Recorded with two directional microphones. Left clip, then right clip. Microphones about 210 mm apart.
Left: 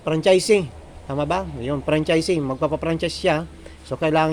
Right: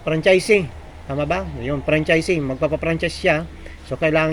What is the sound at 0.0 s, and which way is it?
Speech, 20° left (ahead or behind).